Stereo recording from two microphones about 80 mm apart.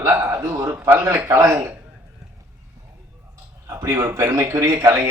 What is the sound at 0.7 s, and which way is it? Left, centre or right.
A man's voice, right.